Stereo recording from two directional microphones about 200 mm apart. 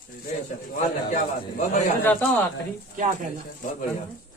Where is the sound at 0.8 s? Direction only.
40° left (ahead or behind).